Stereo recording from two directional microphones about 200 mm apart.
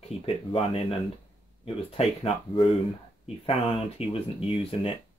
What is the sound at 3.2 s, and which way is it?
Speech, 30° left (ahead or behind).